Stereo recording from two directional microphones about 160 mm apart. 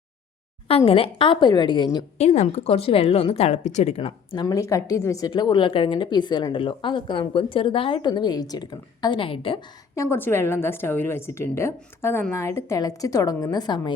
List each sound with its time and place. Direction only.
0.7 s speech: 35° left (ahead or behind)
2.1 s speech: 45° left (ahead or behind)
9.9 s a woman's voice: 15° left (ahead or behind)